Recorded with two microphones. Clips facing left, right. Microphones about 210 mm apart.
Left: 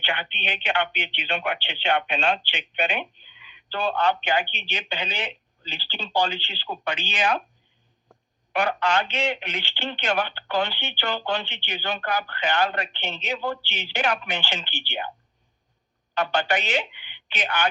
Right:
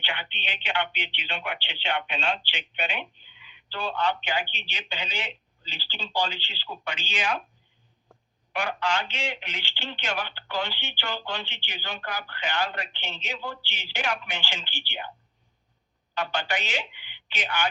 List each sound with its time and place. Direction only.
0.0 s a sound: 55° left (ahead or behind)
0.3 s speech: 55° left (ahead or behind)
8.5 s speech: 60° left (ahead or behind)
16.1 s speech: 60° left (ahead or behind)